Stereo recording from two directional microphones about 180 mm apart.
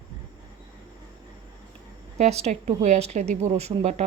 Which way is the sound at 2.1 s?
40° right (ahead or behind).